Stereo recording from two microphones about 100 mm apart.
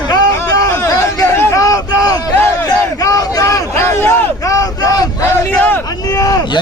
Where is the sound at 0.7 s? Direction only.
25° left (ahead or behind).